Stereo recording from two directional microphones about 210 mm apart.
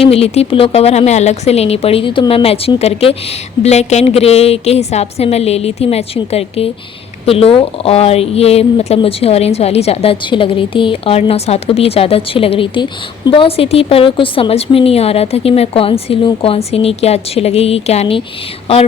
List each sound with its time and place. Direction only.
0.0 s speech: 30° left (ahead or behind)